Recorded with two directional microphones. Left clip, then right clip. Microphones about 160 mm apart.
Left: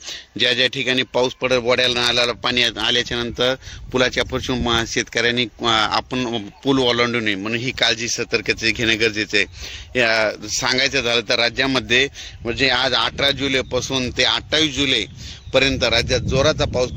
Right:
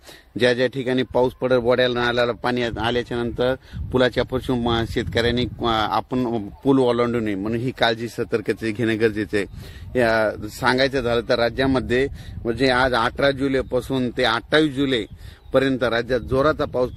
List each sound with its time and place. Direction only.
0.3 s a man's voice: 40° right (ahead or behind); by 16.9 s 65° right (ahead or behind)